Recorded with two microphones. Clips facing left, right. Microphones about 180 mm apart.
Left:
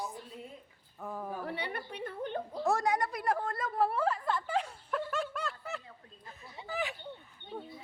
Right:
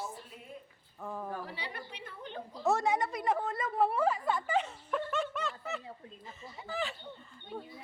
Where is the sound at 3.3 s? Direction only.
5° right (ahead or behind).